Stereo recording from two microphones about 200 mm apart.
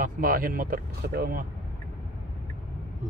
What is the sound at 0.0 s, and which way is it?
Speech, 45° right (ahead or behind).